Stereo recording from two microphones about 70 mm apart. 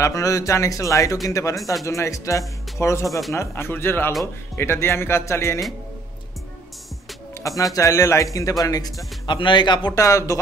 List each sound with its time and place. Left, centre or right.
0.0 s speech: left
1.6 s speech: centre
1.9 s speech: left
3.1 s speech: centre
3.3 s speech: left
7.7 s speech: left
9.9 s speech: left